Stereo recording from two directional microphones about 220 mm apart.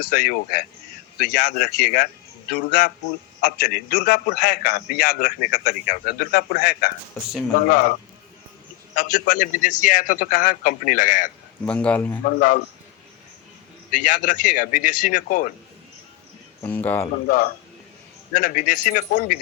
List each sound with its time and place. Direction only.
0.0 s a man's voice: 45° left (ahead or behind)
9.0 s speech: 40° left (ahead or behind)
11.6 s a man's voice: 5° left (ahead or behind)
12.2 s speech: 35° left (ahead or behind)
13.9 s speech: 35° left (ahead or behind)
16.6 s speech: 10° left (ahead or behind)
17.2 s speech: 40° left (ahead or behind)